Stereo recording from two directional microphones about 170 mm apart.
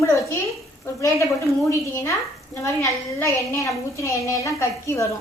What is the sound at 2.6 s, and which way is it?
A woman's voice, 15° left (ahead or behind).